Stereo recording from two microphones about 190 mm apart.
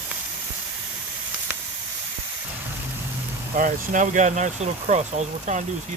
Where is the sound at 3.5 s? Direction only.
45° right (ahead or behind).